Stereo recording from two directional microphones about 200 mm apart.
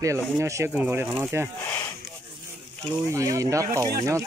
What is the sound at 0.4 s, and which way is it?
Speech, 15° right (ahead or behind).